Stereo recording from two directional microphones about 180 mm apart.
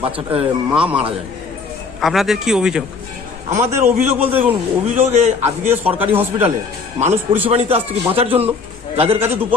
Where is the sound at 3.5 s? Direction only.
40° right (ahead or behind).